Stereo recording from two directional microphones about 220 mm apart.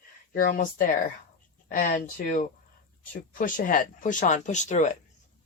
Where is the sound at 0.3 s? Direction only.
40° left (ahead or behind).